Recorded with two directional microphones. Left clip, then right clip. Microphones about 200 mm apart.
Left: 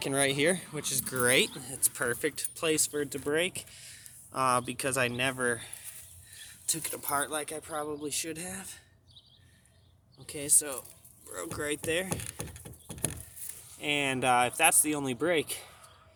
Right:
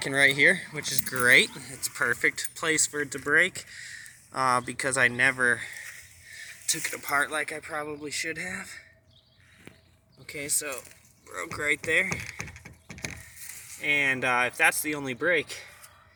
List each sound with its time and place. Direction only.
0.0 s speech: 10° left (ahead or behind)
10.2 s speech: centre (ahead or behind)
13.7 s speech: 15° left (ahead or behind)